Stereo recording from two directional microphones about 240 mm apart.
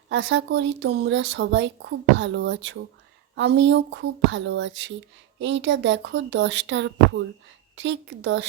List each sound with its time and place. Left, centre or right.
0.1 s speech: right